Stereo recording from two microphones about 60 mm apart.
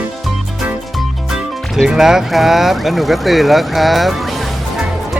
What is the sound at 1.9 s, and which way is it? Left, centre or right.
Speech, centre.